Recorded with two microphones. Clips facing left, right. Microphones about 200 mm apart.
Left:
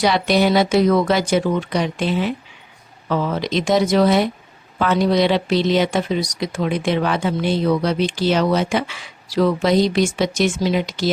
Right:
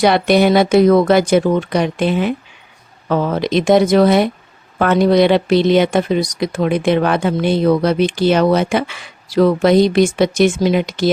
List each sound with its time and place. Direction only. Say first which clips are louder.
0.0 s speech: right 5 dB; 55° right (ahead or behind)